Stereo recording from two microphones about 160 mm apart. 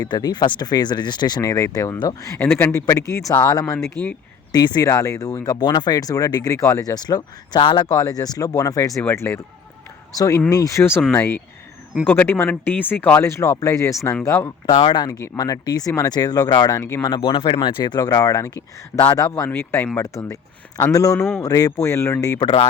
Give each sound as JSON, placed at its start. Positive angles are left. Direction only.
{"t": 0.0, "sound": "speech", "side_deg": 25}
{"t": 14.8, "sound": "speech", "side_deg": 30}